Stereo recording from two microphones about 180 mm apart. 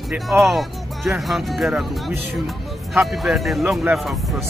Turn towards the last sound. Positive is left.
turn(degrees=0)  # may be behind; listen again after turning